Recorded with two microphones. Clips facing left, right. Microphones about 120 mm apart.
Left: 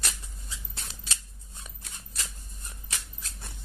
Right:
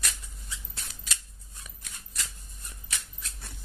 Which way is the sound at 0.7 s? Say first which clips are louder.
Even; 30° left (ahead or behind).